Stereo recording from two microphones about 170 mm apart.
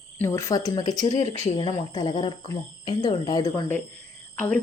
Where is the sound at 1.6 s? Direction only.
25° left (ahead or behind).